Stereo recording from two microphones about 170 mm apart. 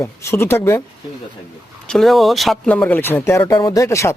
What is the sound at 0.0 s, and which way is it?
Speech, 15° left (ahead or behind).